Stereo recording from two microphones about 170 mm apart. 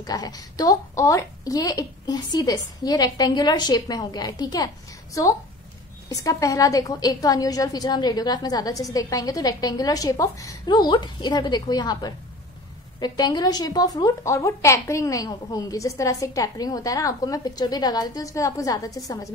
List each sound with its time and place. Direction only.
0.0 s a woman's voice: 25° left (ahead or behind)